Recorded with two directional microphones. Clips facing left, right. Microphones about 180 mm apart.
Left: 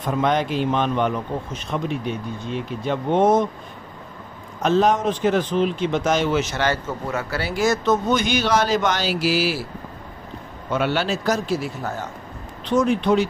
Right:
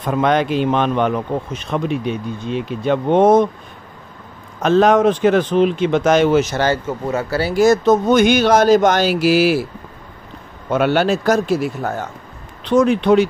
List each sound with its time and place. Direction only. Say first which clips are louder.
0.1 s speech: right 5 dB; 70° right (ahead or behind)
4.6 s speech: right 6 dB; 75° right (ahead or behind)
6.3 s speech: right 6 dB; 45° right (ahead or behind)
6.7 s speech: right 5 dB; 25° right (ahead or behind)
8.2 s speech: right 8 dB; 55° right (ahead or behind)
10.7 s a man's voice: right 6 dB; 50° right (ahead or behind)
12.7 s speech: right 5 dB; 75° right (ahead or behind)